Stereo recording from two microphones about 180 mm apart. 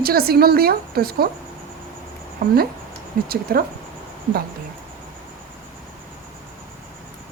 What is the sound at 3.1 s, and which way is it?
Speech, 55° right (ahead or behind).